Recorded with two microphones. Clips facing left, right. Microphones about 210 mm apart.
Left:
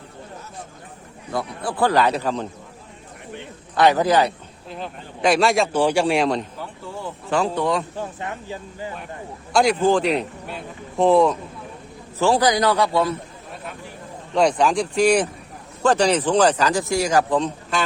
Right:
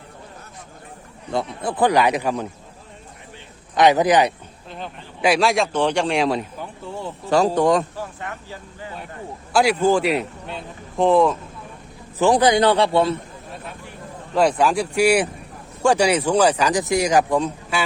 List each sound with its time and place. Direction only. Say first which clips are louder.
1.3 s speech: right 2 dB; 20° right (ahead or behind)
3.8 s speech: right 1 dB; 20° right (ahead or behind)
4.7 s speech: left 2 dB; centre (ahead or behind)
6.6 s a sound: right 1 dB; 25° right (ahead or behind)
7.3 s speech: right 5 dB; 40° right (ahead or behind)
8.2 s speech: left 3 dB; 20° left (ahead or behind)
9.5 s speech: even; 5° right (ahead or behind)
12.2 s a man's voice: right 2 dB; 20° right (ahead or behind)
14.3 s speech: even; 5° right (ahead or behind)